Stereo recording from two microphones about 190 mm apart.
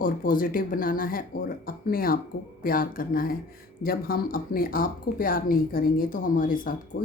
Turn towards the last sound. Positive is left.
turn(degrees=45)  # may be behind; listen again after turning